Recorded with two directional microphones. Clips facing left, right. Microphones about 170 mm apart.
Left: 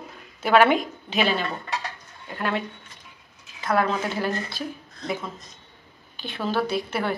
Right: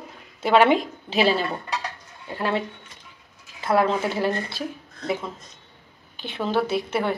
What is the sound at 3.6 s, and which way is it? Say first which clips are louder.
A woman's voice: right 3 dB; 25° right (ahead or behind).